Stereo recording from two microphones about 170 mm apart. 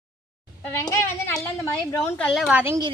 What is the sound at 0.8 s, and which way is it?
Speech, 15° left (ahead or behind).